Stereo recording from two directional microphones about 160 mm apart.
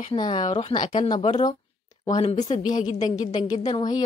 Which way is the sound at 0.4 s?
45° left (ahead or behind).